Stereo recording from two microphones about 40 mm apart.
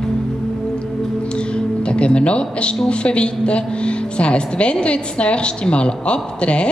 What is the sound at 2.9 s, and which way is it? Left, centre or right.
A woman's voice, left.